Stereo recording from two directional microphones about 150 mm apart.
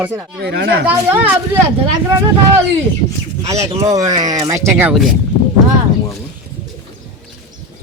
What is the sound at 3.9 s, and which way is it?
Speech, 25° right (ahead or behind).